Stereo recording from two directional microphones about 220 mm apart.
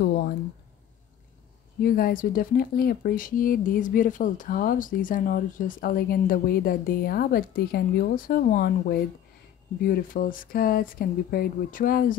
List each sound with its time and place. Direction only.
1.8 s speech: 40° left (ahead or behind)